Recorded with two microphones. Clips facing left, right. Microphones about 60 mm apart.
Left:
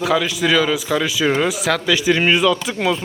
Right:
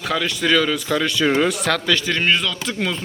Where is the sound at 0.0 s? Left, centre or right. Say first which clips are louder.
Left 4 dB; centre.